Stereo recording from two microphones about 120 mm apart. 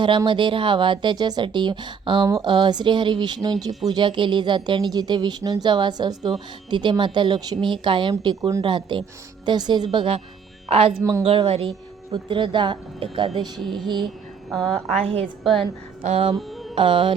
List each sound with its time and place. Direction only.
0.3 s speech: 45° right (ahead or behind); by 8.6 s 30° right (ahead or behind)
8.6 s speech: 45° right (ahead or behind)
12.1 s speech: 45° right (ahead or behind)
14.5 s a woman's voice: centre (ahead or behind)
16.0 s music: 55° right (ahead or behind)
16.7 s speech: 45° right (ahead or behind)